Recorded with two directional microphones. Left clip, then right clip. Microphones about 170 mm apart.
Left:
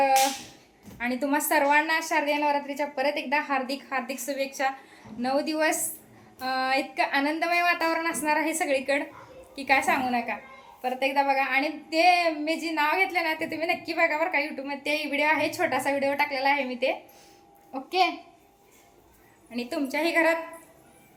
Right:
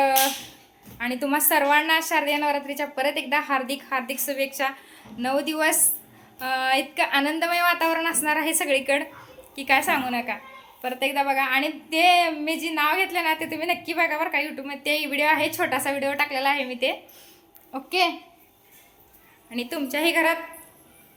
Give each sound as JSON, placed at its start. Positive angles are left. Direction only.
{"t": 0.9, "sound": "a woman's voice", "side_deg": -5}
{"t": 19.5, "sound": "a woman's voice", "side_deg": -5}